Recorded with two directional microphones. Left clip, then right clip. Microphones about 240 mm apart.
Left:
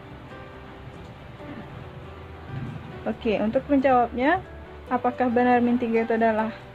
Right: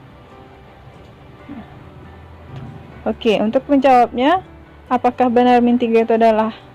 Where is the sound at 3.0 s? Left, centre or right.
Right.